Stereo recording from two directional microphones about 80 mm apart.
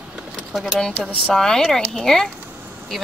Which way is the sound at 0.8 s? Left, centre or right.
Centre.